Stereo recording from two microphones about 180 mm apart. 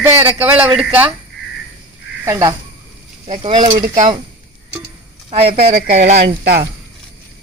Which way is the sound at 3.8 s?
40° right (ahead or behind).